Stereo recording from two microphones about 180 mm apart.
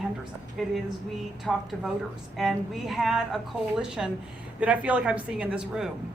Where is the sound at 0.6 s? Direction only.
Centre (ahead or behind).